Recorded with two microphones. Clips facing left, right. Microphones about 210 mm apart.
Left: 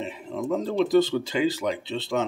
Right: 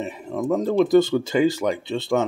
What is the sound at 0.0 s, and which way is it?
Speech, 50° right (ahead or behind).